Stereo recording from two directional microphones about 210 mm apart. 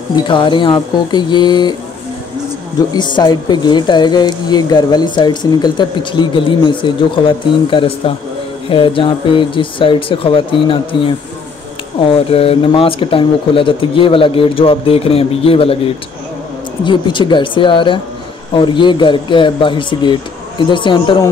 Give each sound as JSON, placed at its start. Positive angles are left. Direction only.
{"t": 0.1, "sound": "speech", "side_deg": 20}
{"t": 2.9, "sound": "speech", "side_deg": 20}
{"t": 12.0, "sound": "speech", "side_deg": 25}